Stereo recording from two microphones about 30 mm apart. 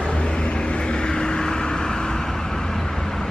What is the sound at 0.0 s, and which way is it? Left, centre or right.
Vehicle, left.